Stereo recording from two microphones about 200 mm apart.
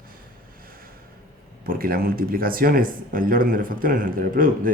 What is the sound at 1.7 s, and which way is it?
Speech, 45° right (ahead or behind).